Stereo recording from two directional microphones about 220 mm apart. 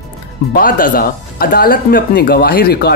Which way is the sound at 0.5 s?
40° left (ahead or behind).